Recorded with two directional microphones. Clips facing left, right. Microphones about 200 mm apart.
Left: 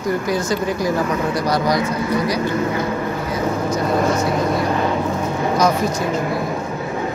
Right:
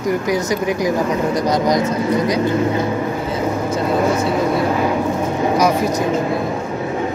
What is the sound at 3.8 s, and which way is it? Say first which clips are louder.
Vehicle: right 2 dB; 5° right (ahead or behind).